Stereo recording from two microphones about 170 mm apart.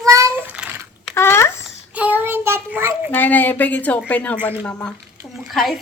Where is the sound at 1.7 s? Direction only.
10° right (ahead or behind).